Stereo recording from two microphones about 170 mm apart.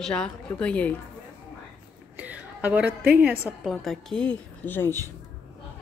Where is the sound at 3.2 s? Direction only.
10° right (ahead or behind).